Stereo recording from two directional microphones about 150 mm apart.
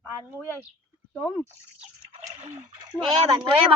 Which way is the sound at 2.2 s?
50° right (ahead or behind).